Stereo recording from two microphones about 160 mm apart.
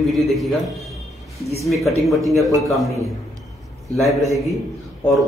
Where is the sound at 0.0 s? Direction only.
Centre (ahead or behind).